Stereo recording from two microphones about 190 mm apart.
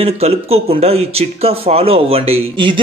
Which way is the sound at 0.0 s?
30° right (ahead or behind).